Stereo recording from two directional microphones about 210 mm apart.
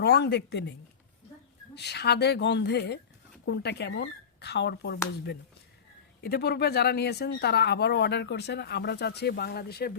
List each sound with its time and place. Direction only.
0.0 s speech: 50° left (ahead or behind)
1.7 s speech: 50° left (ahead or behind)
6.2 s speech: 50° left (ahead or behind)